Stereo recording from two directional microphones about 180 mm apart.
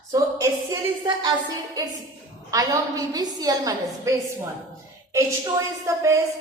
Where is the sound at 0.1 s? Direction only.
15° right (ahead or behind).